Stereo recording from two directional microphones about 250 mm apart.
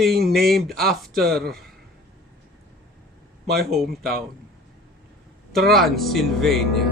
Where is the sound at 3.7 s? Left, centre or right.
Centre.